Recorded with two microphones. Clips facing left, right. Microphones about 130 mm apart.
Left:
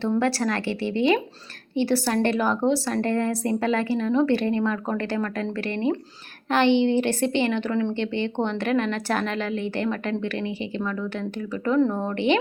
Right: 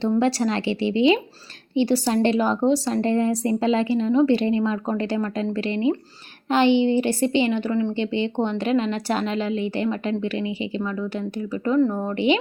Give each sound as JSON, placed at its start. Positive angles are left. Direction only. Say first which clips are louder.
{"t": 0.0, "sound": "a woman's voice", "louder": "right 2 dB", "side_deg": -20}
{"t": 8.0, "sound": "a woman's voice", "louder": "right 2 dB", "side_deg": -15}